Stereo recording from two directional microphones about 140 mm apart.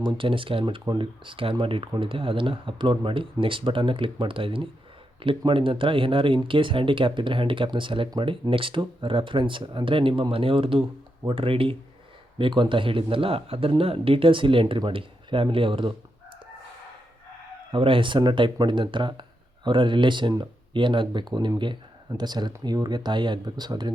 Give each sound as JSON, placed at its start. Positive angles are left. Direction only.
{"t": 0.0, "sound": "speech", "side_deg": -40}
{"t": 17.7, "sound": "speech", "side_deg": -40}